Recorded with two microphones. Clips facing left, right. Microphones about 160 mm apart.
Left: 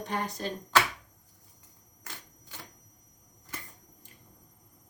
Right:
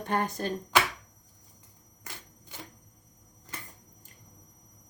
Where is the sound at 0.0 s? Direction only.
50° right (ahead or behind).